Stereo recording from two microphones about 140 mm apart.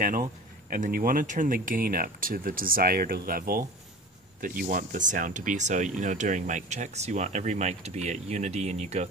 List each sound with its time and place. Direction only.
0.7 s speech: 75° right (ahead or behind); by 9.0 s 50° right (ahead or behind)